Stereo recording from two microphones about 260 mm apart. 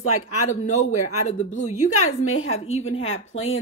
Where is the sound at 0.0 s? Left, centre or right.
Left.